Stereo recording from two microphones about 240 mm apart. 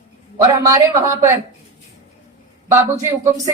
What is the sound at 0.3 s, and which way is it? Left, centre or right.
Speech, centre.